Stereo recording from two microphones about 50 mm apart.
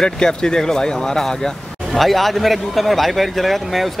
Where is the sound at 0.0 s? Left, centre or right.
Centre.